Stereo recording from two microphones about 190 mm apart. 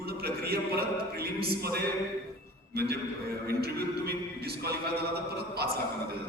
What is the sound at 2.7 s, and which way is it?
A man's voice, 55° right (ahead or behind).